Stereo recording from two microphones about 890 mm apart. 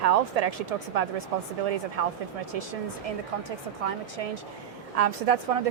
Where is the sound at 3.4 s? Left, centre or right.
Right.